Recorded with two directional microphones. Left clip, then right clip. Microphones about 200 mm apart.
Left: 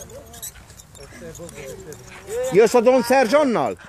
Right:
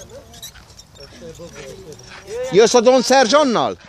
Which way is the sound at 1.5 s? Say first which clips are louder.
Right 1 dB; 35° right (ahead or behind).